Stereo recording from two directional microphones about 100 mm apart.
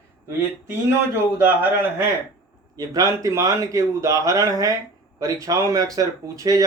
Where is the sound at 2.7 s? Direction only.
40° right (ahead or behind).